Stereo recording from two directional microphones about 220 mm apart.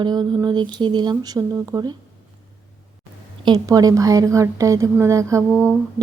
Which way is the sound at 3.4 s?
15° right (ahead or behind).